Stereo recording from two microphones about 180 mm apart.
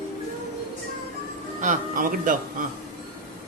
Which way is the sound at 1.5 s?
45° right (ahead or behind).